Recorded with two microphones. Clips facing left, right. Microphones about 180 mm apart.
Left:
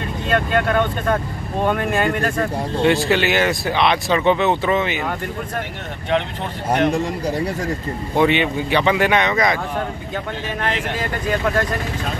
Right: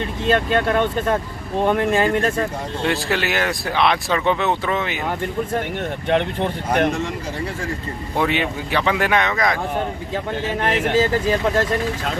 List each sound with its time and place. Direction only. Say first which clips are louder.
0.3 s speech: right 1 dB; 30° right (ahead or behind)
2.8 s speech: left 5 dB; centre (ahead or behind)
8.2 s speech: left 4 dB; centre (ahead or behind)
10.6 s speech: right 7 dB; 25° right (ahead or behind)